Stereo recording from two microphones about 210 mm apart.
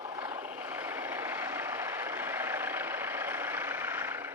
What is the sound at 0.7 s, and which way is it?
Vehicle, 10° right (ahead or behind).